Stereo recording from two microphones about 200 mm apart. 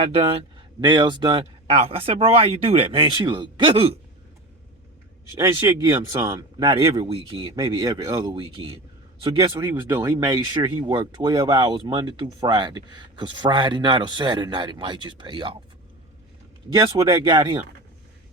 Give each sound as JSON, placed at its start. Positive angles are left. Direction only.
{"t": 0.0, "sound": "speech", "side_deg": -30}
{"t": 5.4, "sound": "speech", "side_deg": -15}
{"t": 6.6, "sound": "speech", "side_deg": -25}
{"t": 9.6, "sound": "speech", "side_deg": -10}
{"t": 16.7, "sound": "speech", "side_deg": -20}